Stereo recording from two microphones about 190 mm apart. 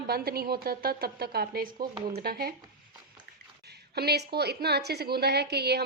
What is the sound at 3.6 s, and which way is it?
A woman's voice, 60° right (ahead or behind).